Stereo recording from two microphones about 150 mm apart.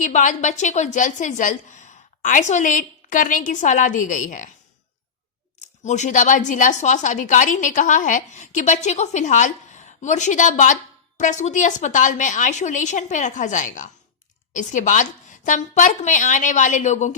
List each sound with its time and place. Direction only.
0.0 s speech: 55° left (ahead or behind)
5.5 s speech: 50° left (ahead or behind)